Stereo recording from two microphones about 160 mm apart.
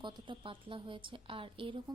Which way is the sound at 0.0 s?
30° right (ahead or behind).